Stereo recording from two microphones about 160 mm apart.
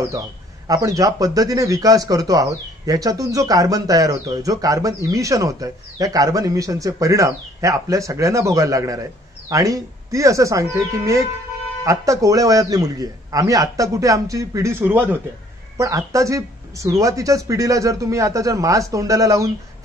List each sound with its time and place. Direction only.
0.7 s speech: 20° right (ahead or behind)